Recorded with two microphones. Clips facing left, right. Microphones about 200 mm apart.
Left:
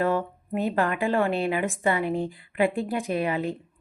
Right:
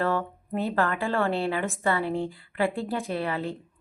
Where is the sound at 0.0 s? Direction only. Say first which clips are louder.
Left 2 dB; 15° left (ahead or behind).